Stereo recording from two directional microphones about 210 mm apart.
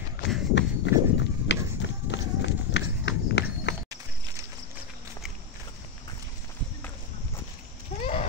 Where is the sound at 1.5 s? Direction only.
55° left (ahead or behind).